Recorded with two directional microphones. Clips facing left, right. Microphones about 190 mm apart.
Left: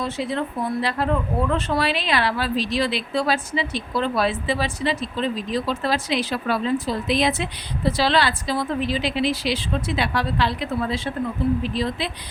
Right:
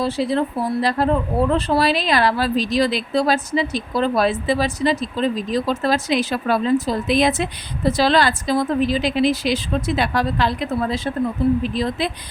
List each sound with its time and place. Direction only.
0.0 s a woman's voice: 35° right (ahead or behind)